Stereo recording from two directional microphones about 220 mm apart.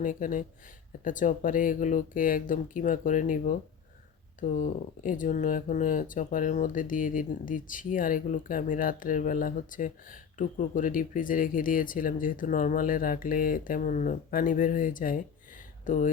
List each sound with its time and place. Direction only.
0.0 s speech: 35° left (ahead or behind)